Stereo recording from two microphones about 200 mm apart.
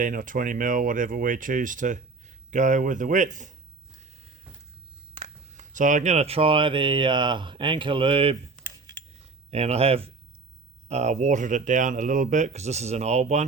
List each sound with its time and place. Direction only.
0.0 s speech: 40° right (ahead or behind)
5.1 s speech: 35° right (ahead or behind)
9.5 s speech: 30° right (ahead or behind)